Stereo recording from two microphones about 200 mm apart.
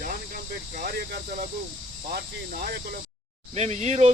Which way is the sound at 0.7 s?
45° right (ahead or behind).